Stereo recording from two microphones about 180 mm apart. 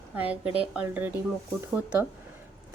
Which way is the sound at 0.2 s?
10° right (ahead or behind).